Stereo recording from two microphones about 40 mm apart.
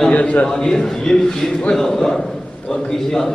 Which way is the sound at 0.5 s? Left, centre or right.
Centre.